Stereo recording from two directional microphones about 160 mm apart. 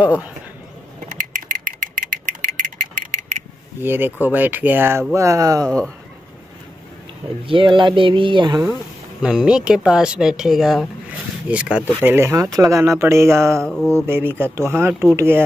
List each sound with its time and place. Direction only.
0.0 s speech: 10° right (ahead or behind)
1.1 s rattle: 55° right (ahead or behind)
3.8 s speech: 15° right (ahead or behind)
7.4 s speech: 30° right (ahead or behind)
9.2 s speech: 5° right (ahead or behind)